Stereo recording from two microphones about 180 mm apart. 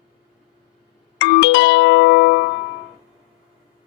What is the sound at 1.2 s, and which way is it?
Music, 90° left.